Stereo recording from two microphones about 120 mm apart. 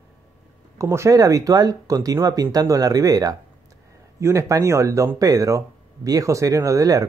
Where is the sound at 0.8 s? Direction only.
25° right (ahead or behind).